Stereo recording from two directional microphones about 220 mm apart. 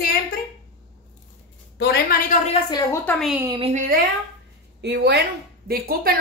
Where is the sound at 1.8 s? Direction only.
45° left (ahead or behind).